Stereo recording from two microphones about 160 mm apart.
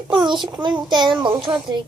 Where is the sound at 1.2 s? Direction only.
5° right (ahead or behind).